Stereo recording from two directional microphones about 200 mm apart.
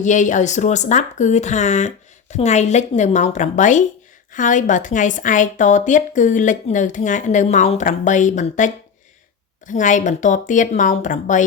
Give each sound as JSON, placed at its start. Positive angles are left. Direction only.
{"t": 0.0, "sound": "a woman's voice", "side_deg": 40}